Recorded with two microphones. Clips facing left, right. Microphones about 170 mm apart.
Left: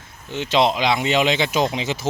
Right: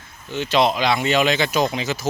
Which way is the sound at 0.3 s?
20° left (ahead or behind).